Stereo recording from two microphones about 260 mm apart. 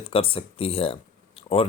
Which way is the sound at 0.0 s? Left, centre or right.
Left.